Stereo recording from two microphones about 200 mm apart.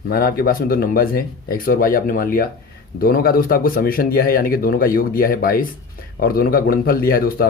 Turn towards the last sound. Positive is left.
turn(degrees=50)  # may be behind; listen again after turning